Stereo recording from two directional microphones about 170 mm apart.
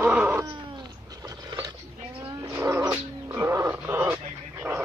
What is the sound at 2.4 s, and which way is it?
Cat, 15° right (ahead or behind).